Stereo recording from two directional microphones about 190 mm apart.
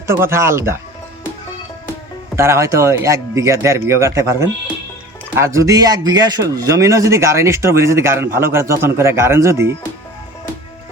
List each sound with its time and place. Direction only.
0.1 s a man's voice: 15° right (ahead or behind)
2.3 s a man's voice: 15° right (ahead or behind)